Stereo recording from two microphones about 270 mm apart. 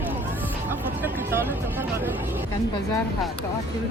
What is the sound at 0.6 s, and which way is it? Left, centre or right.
Music, centre.